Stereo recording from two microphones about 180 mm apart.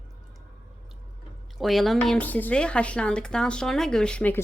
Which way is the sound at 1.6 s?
Centre (ahead or behind).